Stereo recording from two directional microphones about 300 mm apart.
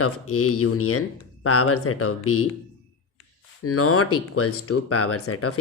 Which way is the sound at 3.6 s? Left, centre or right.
Left.